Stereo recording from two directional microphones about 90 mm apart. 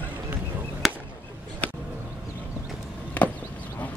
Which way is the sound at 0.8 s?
5° right (ahead or behind).